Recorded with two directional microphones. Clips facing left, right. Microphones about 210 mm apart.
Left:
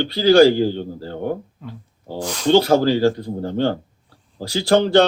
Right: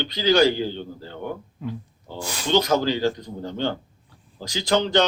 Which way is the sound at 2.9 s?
35° left (ahead or behind).